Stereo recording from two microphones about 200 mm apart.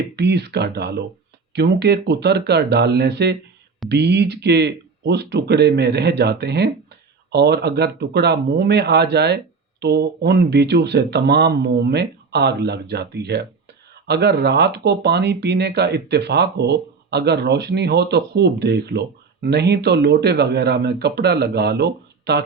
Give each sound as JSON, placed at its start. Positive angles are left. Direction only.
{"t": 0.2, "sound": "speech", "side_deg": -55}